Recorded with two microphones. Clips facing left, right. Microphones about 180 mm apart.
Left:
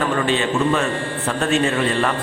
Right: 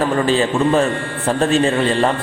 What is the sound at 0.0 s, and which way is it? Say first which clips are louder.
A man's voice: right 4 dB; 35° right (ahead or behind).